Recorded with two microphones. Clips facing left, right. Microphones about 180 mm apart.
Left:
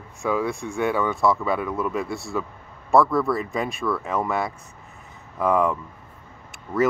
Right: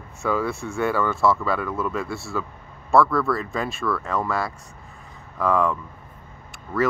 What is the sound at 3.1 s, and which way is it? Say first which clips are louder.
Speech: left 1 dB; 20° left (ahead or behind).